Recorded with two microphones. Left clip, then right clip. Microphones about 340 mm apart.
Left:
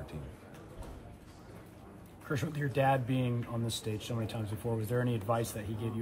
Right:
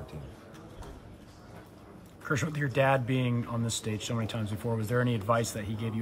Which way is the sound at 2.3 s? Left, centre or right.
Centre.